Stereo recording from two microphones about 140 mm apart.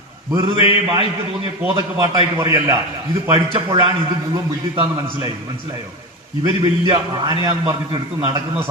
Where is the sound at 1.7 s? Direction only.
25° right (ahead or behind).